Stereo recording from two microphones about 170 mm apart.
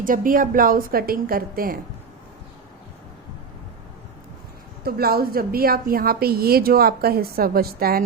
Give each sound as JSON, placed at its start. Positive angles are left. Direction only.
{"t": 0.0, "sound": "a woman's voice", "side_deg": -55}
{"t": 4.8, "sound": "a woman's voice", "side_deg": -65}